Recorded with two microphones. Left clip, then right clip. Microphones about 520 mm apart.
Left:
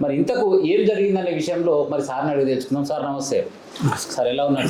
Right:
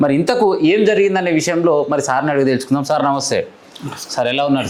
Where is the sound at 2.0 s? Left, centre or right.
Right.